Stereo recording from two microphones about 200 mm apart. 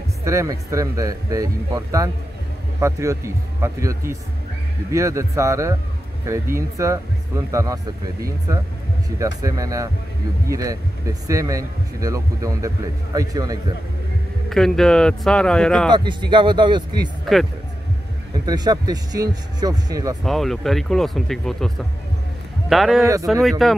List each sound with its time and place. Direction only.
0.2 s a man's voice: 15° right (ahead or behind)
14.5 s speech: centre (ahead or behind)
15.9 s speech: 25° right (ahead or behind)
17.2 s speech: centre (ahead or behind)
18.4 s speech: 20° right (ahead or behind)
20.2 s speech: centre (ahead or behind)